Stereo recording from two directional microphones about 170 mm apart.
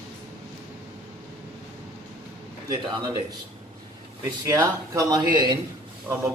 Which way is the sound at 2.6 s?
25° right (ahead or behind).